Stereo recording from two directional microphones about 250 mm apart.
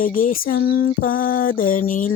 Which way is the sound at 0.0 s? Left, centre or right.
Left.